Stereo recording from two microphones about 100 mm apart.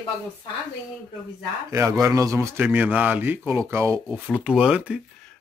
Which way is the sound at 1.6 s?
30° right (ahead or behind).